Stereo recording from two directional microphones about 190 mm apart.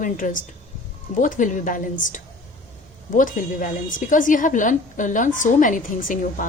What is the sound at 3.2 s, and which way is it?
A woman's voice, 45° left (ahead or behind).